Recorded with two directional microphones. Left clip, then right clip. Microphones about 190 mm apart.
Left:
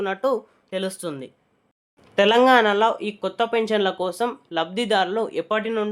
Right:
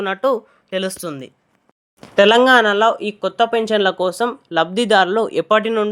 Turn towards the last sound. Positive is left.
turn(degrees=-30)  # may be behind; listen again after turning